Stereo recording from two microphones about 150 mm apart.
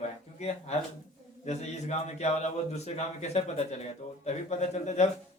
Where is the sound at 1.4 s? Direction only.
50° left (ahead or behind).